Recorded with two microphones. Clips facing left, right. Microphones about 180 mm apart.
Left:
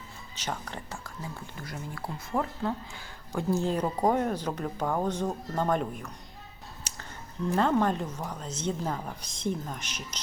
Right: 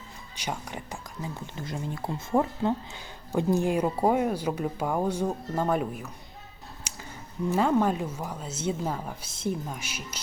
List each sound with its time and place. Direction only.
0.3 s speech: 10° right (ahead or behind)
7.5 s speech: 10° right (ahead or behind)